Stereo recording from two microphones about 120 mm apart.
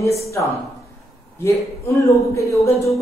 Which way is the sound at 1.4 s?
25° left (ahead or behind).